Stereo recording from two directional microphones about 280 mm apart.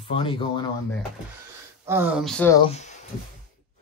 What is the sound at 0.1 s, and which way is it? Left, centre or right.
Speech, centre.